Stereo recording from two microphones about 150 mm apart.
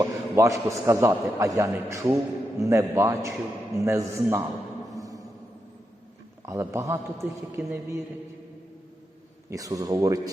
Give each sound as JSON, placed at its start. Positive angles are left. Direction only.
{"t": 0.0, "sound": "a man's voice", "side_deg": -20}
{"t": 4.9, "sound": "music", "side_deg": -25}
{"t": 6.4, "sound": "a man's voice", "side_deg": -20}
{"t": 9.5, "sound": "a man's voice", "side_deg": -25}